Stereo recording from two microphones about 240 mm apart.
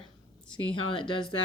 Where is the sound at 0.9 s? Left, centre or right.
Left.